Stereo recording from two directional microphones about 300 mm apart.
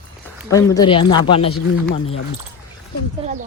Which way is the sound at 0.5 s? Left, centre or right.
Centre.